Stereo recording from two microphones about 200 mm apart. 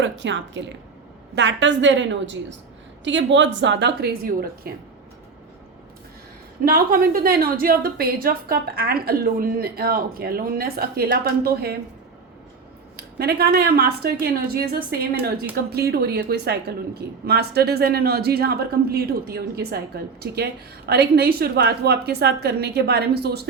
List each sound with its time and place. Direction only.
0.0 s a woman's voice: 65° right (ahead or behind); by 4.7 s 50° right (ahead or behind)
6.7 s a woman's voice: 45° right (ahead or behind)
13.0 s a woman's voice: 50° right (ahead or behind)